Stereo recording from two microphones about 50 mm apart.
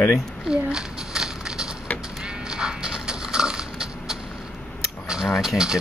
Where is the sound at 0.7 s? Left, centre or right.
Centre.